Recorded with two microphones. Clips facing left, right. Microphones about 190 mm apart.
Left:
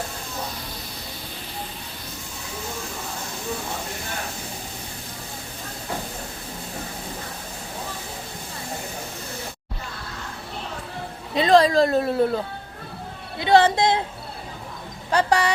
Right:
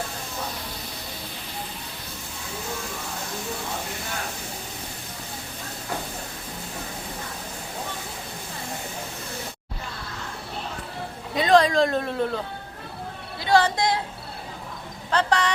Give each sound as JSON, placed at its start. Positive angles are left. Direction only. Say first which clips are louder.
{"t": 11.3, "sound": "speech", "louder": "left 2 dB", "side_deg": 0}
{"t": 13.4, "sound": "a woman's voice", "louder": "left 4 dB", "side_deg": 20}
{"t": 15.1, "sound": "speech", "louder": "left 3 dB", "side_deg": 10}